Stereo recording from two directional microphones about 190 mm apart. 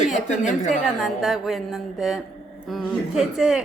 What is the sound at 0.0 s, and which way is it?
Speech, 40° left (ahead or behind).